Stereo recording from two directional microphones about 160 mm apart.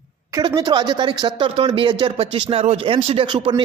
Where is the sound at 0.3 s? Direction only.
25° right (ahead or behind).